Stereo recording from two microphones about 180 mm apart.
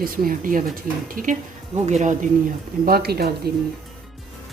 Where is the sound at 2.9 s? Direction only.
60° right (ahead or behind).